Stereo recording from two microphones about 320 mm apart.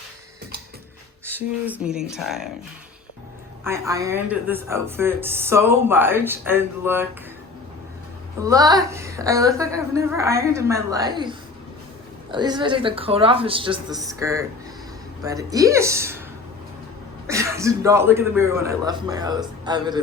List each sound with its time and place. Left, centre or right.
1.2 s speech: centre
3.6 s a woman's voice: centre
8.4 s a woman's voice: centre
17.2 s a woman's voice: centre